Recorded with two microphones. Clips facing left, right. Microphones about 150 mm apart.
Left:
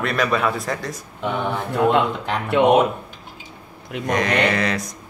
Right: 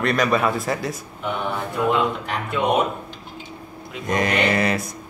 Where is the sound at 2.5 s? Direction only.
60° left (ahead or behind).